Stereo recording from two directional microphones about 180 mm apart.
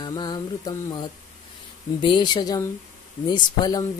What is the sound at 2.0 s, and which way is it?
Speech, 25° left (ahead or behind).